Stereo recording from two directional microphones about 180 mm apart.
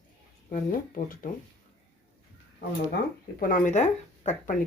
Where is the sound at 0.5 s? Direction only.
50° left (ahead or behind).